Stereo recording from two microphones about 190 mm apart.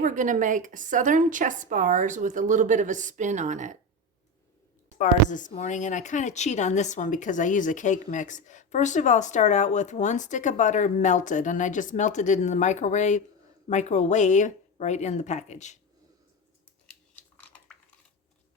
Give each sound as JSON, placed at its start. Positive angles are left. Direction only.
{"t": 0.0, "sound": "a woman's voice", "side_deg": -45}
{"t": 4.9, "sound": "speech", "side_deg": 40}